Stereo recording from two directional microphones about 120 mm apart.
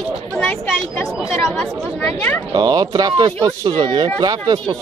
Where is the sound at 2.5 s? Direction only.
35° right (ahead or behind).